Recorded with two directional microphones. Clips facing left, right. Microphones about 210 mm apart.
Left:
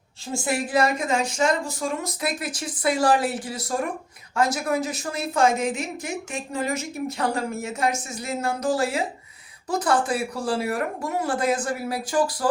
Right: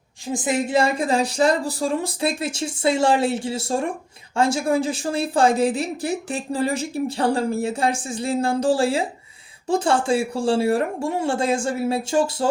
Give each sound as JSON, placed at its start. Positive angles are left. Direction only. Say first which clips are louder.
{"t": 0.3, "sound": "a woman's voice", "louder": "right 3 dB", "side_deg": -20}